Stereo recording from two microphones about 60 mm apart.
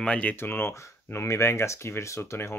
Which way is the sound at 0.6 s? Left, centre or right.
Left.